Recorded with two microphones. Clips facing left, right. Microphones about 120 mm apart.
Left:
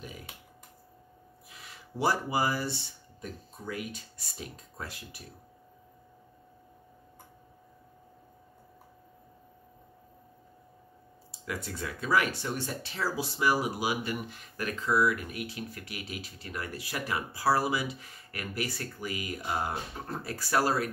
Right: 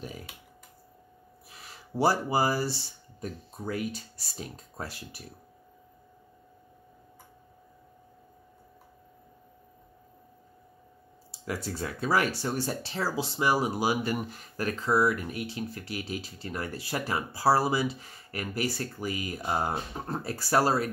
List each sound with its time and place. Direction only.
1.5 s speech: 35° right (ahead or behind)
11.4 s speech: 30° right (ahead or behind)